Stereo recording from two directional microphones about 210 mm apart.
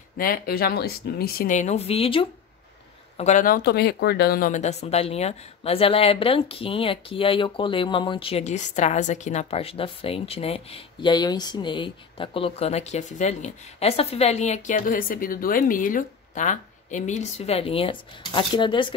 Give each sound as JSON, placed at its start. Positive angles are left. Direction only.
{"t": 0.2, "sound": "speech", "side_deg": 45}